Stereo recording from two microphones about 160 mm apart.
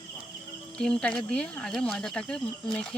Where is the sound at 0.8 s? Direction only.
5° left (ahead or behind).